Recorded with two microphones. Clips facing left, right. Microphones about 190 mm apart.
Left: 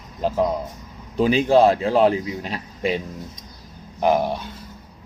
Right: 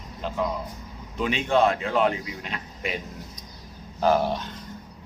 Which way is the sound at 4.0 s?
15° left (ahead or behind).